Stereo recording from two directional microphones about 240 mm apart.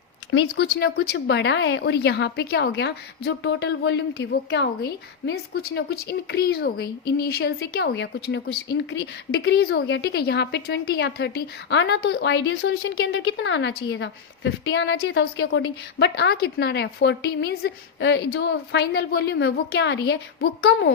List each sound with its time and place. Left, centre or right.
0.3 s speech: left